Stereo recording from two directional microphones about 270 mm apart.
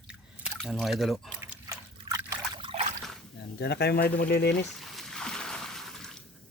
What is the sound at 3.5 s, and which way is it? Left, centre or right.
Speech, left.